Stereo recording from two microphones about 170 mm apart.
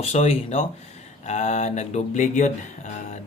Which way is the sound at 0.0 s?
40° left (ahead or behind).